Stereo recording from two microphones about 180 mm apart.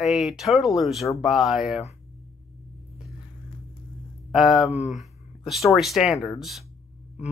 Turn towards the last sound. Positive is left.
turn(degrees=0)  # may be behind; listen again after turning